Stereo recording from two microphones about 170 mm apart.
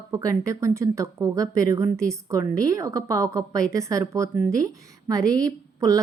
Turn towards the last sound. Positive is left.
turn(degrees=-20)  # may be behind; listen again after turning